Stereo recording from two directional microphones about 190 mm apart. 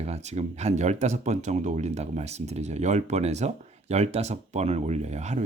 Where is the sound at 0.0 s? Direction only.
35° right (ahead or behind).